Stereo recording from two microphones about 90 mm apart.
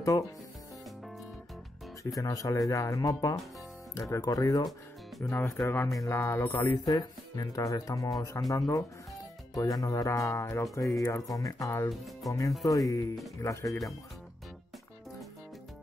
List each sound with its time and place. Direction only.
2.1 s speech: 40° left (ahead or behind)